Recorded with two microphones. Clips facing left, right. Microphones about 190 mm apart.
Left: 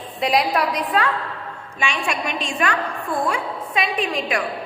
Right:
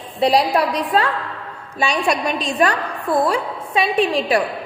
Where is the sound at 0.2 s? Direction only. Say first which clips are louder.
Right 4 dB; 30° right (ahead or behind).